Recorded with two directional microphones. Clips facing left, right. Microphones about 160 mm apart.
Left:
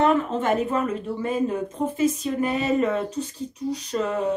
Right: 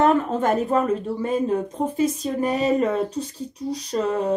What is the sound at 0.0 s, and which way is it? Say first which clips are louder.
Speech: right 2 dB; 40° right (ahead or behind).